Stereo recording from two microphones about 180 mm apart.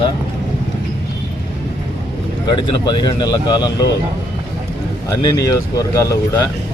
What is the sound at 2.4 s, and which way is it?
Speech, 25° left (ahead or behind).